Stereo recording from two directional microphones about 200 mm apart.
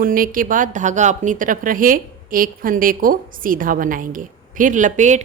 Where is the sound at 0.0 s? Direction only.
45° right (ahead or behind).